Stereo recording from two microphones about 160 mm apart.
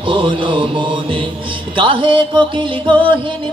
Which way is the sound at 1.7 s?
35° right (ahead or behind).